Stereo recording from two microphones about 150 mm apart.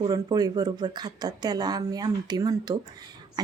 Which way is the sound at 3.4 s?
25° right (ahead or behind).